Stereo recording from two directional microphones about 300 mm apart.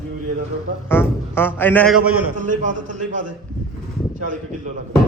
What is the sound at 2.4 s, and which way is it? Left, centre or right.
Speech, right.